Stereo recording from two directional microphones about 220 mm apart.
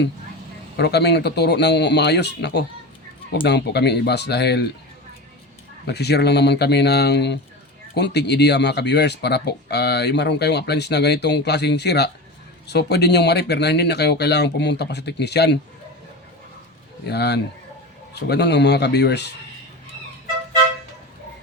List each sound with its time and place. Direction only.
0.8 s speech: 50° left (ahead or behind)
5.8 s speech: 50° left (ahead or behind)
17.1 s speech: 50° left (ahead or behind)